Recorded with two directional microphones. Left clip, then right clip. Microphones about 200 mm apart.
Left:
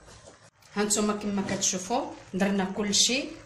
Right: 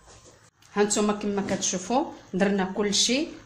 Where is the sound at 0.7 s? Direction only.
40° right (ahead or behind).